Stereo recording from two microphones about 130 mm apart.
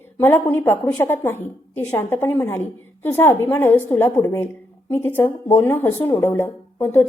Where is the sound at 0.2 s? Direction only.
15° left (ahead or behind).